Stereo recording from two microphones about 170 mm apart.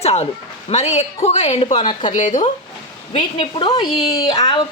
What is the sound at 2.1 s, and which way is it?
Speech, 45° left (ahead or behind).